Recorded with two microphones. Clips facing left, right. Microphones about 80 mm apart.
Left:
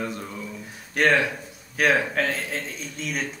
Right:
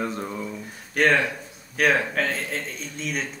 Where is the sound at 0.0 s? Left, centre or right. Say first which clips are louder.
Right 3 dB; right.